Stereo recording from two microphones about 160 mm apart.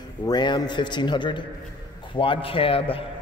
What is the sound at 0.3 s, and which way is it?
A man's voice, 25° left (ahead or behind).